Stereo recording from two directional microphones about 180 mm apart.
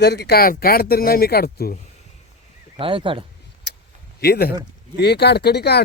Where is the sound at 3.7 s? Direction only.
70° left (ahead or behind).